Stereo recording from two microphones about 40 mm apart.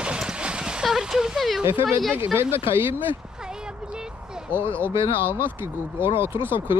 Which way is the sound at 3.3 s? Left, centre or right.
Centre.